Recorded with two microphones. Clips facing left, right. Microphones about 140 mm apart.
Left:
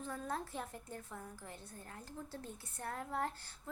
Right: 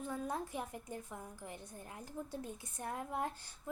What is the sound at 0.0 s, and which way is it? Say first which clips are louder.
A woman's voice: right 2 dB; 15° right (ahead or behind).